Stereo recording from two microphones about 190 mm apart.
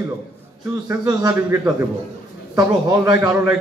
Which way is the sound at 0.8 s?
15° right (ahead or behind).